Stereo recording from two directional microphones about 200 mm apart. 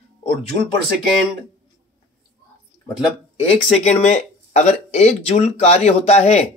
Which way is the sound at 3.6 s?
30° left (ahead or behind).